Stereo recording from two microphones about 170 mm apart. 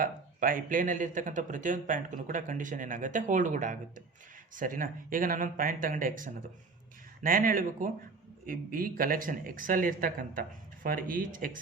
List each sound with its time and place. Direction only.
0.0 s speech: 55° right (ahead or behind)